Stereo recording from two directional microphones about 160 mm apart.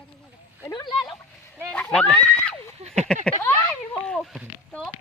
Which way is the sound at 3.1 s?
5° left (ahead or behind).